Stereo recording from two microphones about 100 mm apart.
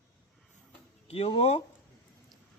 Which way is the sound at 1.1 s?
90° left.